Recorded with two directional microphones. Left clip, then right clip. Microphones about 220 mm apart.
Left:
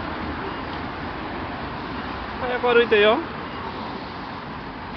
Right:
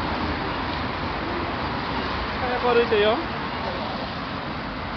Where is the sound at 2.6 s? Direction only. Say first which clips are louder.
Left 3 dB; 35° left (ahead or behind).